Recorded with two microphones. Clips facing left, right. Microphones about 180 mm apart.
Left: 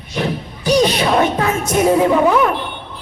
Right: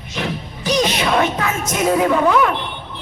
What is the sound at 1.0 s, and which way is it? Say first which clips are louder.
Music: left 3 dB; 35° left (ahead or behind).